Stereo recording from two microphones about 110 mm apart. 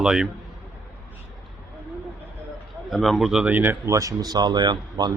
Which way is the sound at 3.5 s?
20° right (ahead or behind).